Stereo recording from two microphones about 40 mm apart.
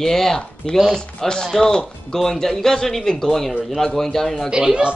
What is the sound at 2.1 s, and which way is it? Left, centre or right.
A man's voice, centre.